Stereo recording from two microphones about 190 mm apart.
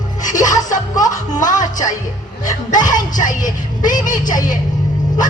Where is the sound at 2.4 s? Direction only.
45° left (ahead or behind).